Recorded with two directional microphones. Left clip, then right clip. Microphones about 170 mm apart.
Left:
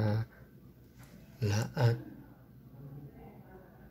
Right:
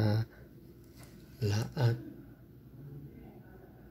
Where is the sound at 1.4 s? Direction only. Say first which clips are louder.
Left 1 dB; centre (ahead or behind).